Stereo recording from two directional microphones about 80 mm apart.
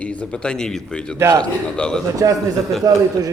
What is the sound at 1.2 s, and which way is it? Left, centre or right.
Speech, right.